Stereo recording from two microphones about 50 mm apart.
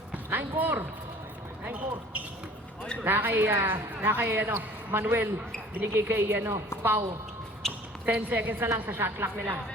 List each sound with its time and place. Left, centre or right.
0.3 s a woman's voice: right
1.6 s speech: right
3.0 s a woman's voice: right
8.0 s a woman's voice: right